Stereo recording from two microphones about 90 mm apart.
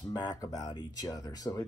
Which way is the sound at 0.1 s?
45° left (ahead or behind).